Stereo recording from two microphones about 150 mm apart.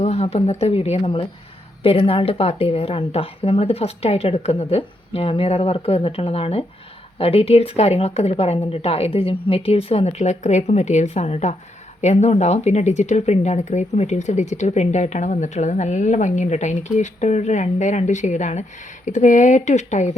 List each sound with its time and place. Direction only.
0.0 s speech: 45° left (ahead or behind)